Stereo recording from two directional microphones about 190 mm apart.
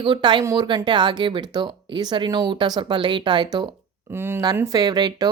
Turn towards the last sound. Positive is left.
turn(degrees=-20)  # may be behind; listen again after turning